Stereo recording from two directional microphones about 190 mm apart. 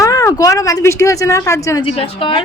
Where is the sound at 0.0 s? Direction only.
15° left (ahead or behind).